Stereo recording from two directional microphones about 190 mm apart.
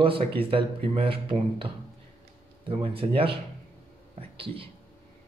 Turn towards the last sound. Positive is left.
turn(degrees=-30)  # may be behind; listen again after turning